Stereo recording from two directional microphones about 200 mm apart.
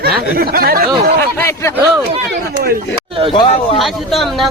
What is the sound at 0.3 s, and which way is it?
Speech, 50° right (ahead or behind).